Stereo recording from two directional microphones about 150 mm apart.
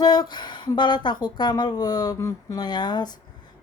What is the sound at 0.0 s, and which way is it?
Speech, 25° left (ahead or behind).